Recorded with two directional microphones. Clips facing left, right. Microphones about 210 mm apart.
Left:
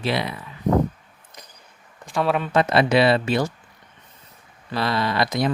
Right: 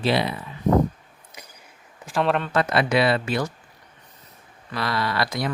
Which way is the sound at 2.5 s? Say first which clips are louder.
Left 5 dB; 25° left (ahead or behind).